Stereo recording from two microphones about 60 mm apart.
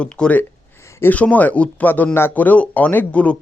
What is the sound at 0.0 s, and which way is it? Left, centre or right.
Speech, left.